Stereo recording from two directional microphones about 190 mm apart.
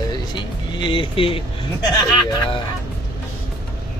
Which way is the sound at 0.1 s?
25° left (ahead or behind).